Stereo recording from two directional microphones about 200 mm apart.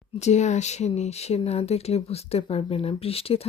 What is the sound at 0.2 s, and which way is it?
Speech, 35° left (ahead or behind).